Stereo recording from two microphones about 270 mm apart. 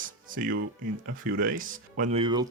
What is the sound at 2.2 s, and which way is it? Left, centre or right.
Speech, centre.